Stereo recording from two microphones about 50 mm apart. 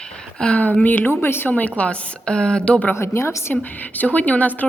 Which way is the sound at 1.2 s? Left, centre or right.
Left.